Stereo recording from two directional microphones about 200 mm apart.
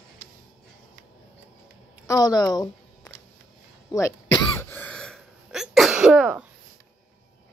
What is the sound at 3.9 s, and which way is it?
Throat clearing, 15° left (ahead or behind).